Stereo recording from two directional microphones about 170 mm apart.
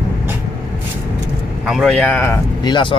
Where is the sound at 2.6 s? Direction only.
25° left (ahead or behind).